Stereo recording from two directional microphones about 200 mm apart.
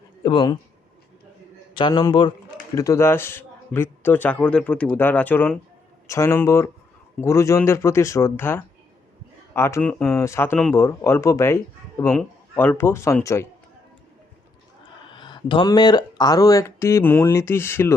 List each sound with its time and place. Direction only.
0.2 s a man's voice: 25° left (ahead or behind)
1.7 s a man's voice: 20° left (ahead or behind)
15.1 s a man's voice: 25° left (ahead or behind)